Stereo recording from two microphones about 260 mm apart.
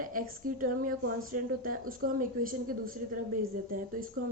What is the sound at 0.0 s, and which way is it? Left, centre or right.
A woman's voice, right.